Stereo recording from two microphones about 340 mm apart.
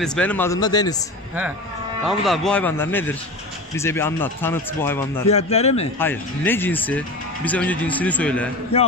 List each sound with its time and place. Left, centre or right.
0.0 s speech: centre
2.0 s speech: centre
5.3 s a man's voice: centre
5.9 s speech: centre
8.7 s speech: centre